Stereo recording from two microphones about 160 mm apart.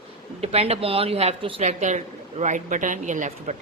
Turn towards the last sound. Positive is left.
turn(degrees=-50)  # may be behind; listen again after turning